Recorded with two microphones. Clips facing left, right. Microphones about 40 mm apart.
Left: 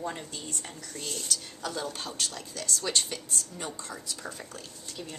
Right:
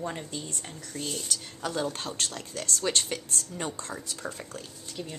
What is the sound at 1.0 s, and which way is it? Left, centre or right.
Speech, centre.